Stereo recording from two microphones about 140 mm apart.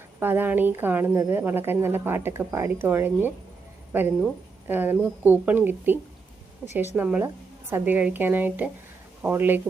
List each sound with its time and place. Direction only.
0.2 s a woman's voice: 15° right (ahead or behind)